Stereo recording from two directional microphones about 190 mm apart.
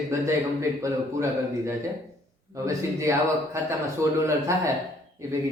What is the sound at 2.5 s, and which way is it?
Speech, 15° right (ahead or behind).